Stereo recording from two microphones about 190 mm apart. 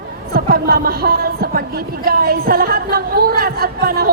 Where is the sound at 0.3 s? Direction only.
50° right (ahead or behind).